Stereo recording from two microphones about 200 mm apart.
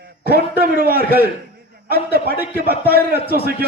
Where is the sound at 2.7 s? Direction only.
50° left (ahead or behind).